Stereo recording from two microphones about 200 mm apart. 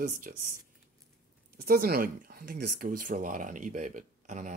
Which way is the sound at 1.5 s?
50° right (ahead or behind).